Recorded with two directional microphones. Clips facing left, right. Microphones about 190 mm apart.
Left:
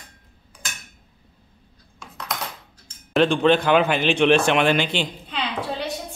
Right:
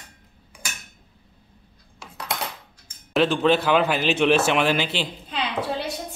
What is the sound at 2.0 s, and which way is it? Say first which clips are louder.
Coin: right 1 dB; 30° right (ahead or behind).